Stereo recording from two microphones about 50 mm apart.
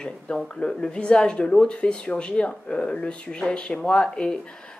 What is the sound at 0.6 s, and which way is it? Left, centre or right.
A woman's voice, centre.